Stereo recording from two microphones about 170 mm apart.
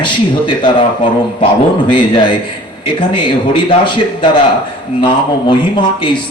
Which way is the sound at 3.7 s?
30° left (ahead or behind).